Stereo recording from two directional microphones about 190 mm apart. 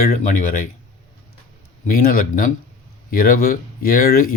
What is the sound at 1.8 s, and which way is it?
Speech, 45° left (ahead or behind).